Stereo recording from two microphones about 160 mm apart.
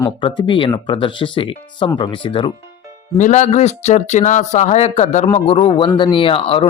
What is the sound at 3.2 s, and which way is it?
Speech, 50° left (ahead or behind).